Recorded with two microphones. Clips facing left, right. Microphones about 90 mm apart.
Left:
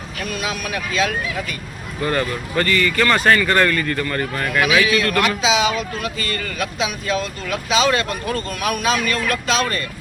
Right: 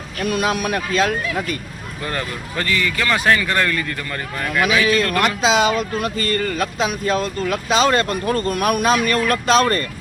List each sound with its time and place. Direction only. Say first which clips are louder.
0.3 s speech: right 7 dB; 50° right (ahead or behind)
2.0 s speech: left 5 dB; centre (ahead or behind)
5.4 s speech: right 2 dB; 50° right (ahead or behind)